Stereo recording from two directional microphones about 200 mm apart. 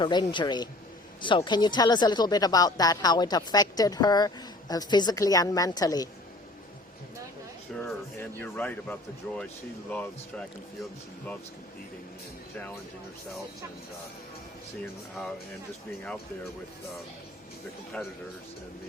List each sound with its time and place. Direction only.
0.0 s speech: 20° left (ahead or behind)
7.8 s speech: 10° left (ahead or behind)
17.9 s speech: 5° left (ahead or behind)